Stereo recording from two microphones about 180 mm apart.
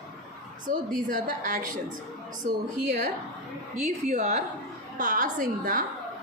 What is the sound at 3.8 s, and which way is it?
A woman's voice, 40° right (ahead or behind).